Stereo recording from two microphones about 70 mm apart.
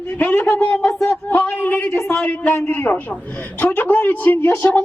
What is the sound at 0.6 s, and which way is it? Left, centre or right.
A man's voice, centre.